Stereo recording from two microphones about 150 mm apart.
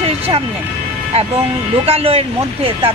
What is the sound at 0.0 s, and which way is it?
Vehicle, 40° right (ahead or behind).